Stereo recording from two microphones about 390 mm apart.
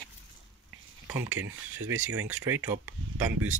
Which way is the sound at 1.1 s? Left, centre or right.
Centre.